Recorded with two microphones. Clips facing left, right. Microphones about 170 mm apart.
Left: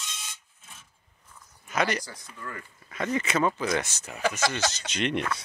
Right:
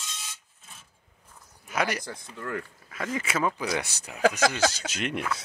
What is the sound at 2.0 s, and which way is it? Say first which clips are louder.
Speech: right 5 dB; 60° right (ahead or behind).